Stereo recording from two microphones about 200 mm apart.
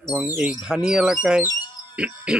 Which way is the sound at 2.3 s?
5° right (ahead or behind).